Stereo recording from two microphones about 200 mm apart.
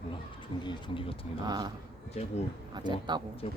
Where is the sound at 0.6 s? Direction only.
25° left (ahead or behind).